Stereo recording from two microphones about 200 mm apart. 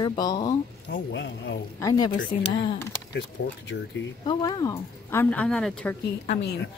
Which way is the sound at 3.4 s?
60° left (ahead or behind).